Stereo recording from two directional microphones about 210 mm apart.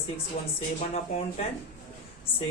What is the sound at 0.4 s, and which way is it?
Speech, 35° left (ahead or behind).